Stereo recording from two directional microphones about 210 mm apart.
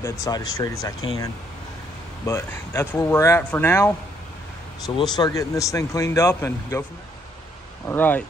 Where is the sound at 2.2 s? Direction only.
10° left (ahead or behind).